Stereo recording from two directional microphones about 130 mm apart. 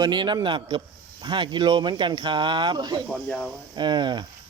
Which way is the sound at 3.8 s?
35° right (ahead or behind).